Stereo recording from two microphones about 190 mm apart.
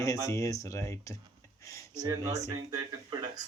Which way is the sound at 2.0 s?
20° right (ahead or behind).